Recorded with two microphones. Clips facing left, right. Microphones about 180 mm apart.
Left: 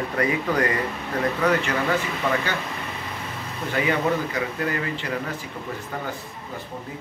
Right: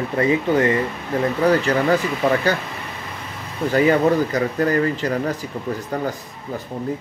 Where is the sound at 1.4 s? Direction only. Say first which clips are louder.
Right 6 dB; 35° right (ahead or behind).